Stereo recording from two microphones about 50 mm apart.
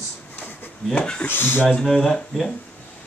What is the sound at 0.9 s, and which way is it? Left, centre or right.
Speech, left.